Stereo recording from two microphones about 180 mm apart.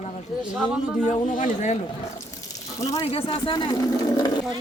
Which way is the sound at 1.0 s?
45° left (ahead or behind).